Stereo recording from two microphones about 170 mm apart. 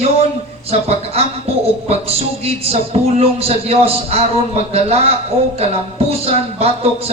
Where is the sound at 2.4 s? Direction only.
40° right (ahead or behind).